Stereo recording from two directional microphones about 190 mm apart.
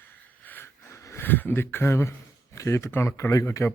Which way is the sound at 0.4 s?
10° left (ahead or behind).